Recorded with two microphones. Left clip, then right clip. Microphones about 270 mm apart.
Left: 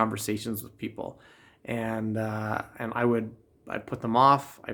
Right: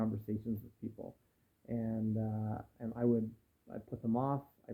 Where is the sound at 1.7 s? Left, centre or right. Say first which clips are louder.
Left 9 dB; centre.